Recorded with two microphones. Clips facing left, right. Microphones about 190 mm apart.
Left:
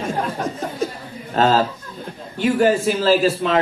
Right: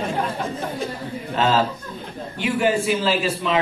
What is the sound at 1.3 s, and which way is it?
A man's voice, 40° left (ahead or behind).